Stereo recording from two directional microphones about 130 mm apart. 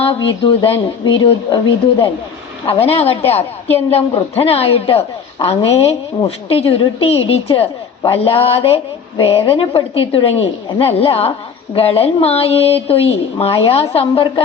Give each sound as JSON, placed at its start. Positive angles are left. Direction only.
{"t": 0.0, "sound": "a woman's voice", "side_deg": 45}